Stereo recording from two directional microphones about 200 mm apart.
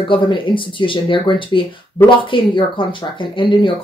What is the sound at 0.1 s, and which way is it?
Speech, 25° left (ahead or behind).